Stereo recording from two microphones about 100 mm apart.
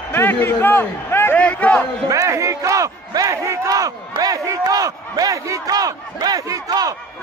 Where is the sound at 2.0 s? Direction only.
35° right (ahead or behind).